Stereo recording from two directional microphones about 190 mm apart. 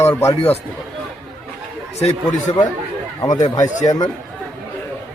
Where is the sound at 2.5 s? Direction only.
30° left (ahead or behind).